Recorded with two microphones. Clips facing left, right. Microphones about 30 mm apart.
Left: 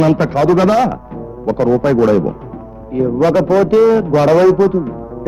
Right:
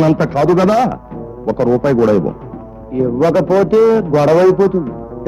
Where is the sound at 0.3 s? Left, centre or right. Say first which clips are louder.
Even; centre.